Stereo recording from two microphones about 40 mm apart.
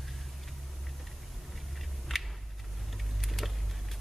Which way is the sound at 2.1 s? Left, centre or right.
Centre.